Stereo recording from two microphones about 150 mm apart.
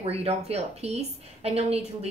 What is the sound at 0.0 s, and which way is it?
A woman's voice, 45° right (ahead or behind).